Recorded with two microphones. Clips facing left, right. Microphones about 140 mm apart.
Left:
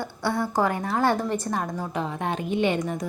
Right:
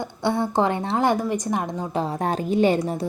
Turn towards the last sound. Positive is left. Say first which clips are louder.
# right 4 dB
turn(degrees=-35)  # may be behind; listen again after turning